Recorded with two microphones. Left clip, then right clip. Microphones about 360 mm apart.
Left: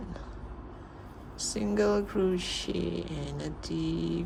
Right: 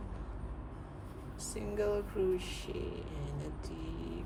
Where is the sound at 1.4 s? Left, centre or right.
Centre.